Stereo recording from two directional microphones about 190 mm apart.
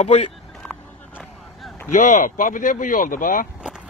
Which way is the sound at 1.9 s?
40° left (ahead or behind).